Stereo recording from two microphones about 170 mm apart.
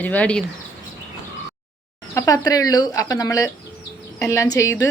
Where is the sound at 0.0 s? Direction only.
10° left (ahead or behind).